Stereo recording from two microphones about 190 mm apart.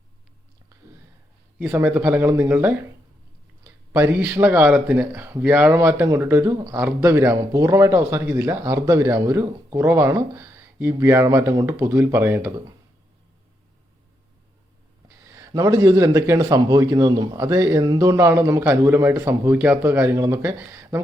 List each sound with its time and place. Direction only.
1.5 s speech: 10° right (ahead or behind)
15.3 s speech: 20° right (ahead or behind)